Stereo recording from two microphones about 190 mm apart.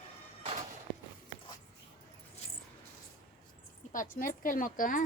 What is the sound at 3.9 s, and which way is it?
A woman's voice, 45° left (ahead or behind).